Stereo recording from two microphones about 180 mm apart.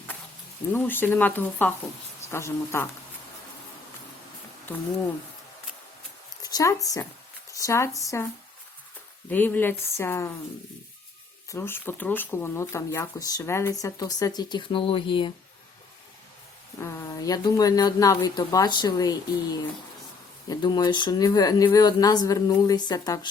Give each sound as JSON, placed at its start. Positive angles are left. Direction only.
{"t": 0.7, "sound": "speech", "side_deg": 10}
{"t": 6.4, "sound": "a sound", "side_deg": 20}
{"t": 7.6, "sound": "speech", "side_deg": 15}
{"t": 9.3, "sound": "speech", "side_deg": 10}
{"t": 11.4, "sound": "speech", "side_deg": 15}
{"t": 16.8, "sound": "speech", "side_deg": 20}